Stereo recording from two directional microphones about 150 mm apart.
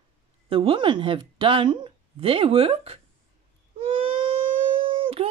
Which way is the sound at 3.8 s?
35° right (ahead or behind).